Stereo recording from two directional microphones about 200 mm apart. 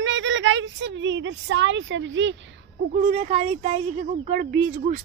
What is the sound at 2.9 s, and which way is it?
A woman's voice, 35° right (ahead or behind).